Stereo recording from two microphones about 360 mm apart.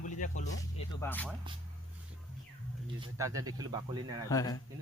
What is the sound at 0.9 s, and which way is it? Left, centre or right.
Speech, centre.